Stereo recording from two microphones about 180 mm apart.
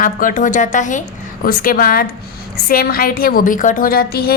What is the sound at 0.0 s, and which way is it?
A woman's voice, 50° left (ahead or behind).